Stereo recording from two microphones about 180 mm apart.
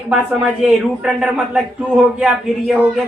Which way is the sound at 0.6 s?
5° right (ahead or behind).